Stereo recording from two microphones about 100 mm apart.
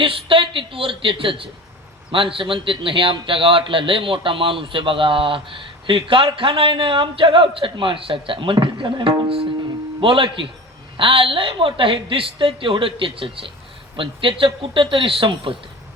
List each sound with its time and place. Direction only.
0.0 s a man's voice: 60° right (ahead or behind)